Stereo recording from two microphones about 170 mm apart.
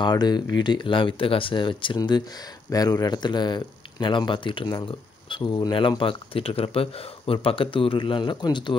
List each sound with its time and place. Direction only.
0.0 s speech: 25° left (ahead or behind)